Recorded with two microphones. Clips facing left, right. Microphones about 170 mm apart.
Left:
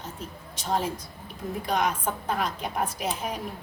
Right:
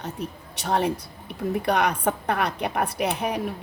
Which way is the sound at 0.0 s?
65° right (ahead or behind).